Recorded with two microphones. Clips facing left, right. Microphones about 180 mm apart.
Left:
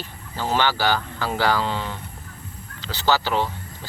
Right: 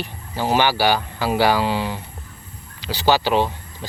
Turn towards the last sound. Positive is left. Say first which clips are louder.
# right 4 dB
turn(degrees=-15)  # may be behind; listen again after turning